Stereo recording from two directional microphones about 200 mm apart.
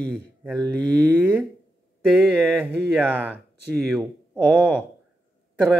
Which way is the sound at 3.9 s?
5° right (ahead or behind).